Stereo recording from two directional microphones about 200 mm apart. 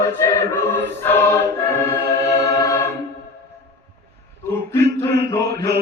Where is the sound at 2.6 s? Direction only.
15° left (ahead or behind).